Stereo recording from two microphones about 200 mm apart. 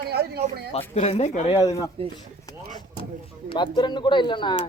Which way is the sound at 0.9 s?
30° left (ahead or behind).